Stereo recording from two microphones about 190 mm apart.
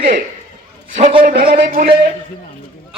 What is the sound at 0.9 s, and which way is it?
Speech, 35° right (ahead or behind).